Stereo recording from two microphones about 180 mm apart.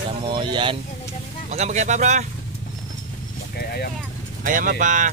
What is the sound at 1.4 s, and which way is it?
Speech, 40° right (ahead or behind).